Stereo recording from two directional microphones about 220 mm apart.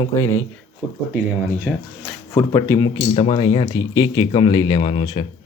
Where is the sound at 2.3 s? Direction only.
15° left (ahead or behind).